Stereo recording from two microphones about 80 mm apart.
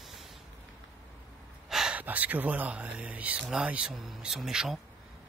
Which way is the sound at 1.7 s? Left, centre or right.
Centre.